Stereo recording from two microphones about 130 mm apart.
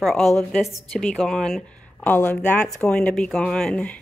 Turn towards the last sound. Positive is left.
turn(degrees=10)  # may be behind; listen again after turning